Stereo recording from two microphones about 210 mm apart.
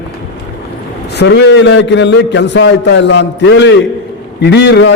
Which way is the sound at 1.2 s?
55° left (ahead or behind).